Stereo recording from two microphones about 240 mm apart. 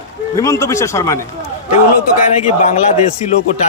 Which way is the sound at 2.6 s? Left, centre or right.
Left.